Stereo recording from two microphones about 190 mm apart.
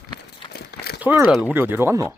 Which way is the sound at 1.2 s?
Centre (ahead or behind).